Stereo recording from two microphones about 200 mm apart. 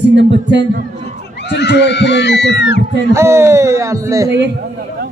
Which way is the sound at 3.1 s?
15° right (ahead or behind).